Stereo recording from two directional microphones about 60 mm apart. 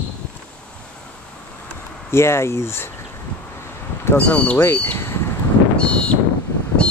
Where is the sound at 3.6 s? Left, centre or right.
Left.